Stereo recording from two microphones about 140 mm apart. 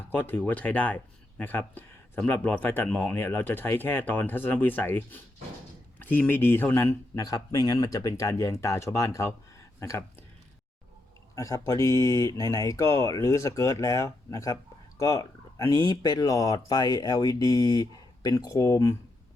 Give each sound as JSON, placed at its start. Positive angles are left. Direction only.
{"t": 0.1, "sound": "speech", "side_deg": 15}
{"t": 11.3, "sound": "speech", "side_deg": 25}